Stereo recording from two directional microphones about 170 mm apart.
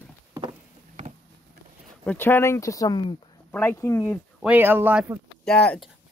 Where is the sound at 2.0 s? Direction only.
15° left (ahead or behind).